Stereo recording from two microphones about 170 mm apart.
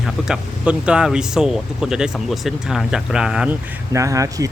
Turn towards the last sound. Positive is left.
turn(degrees=-20)  # may be behind; listen again after turning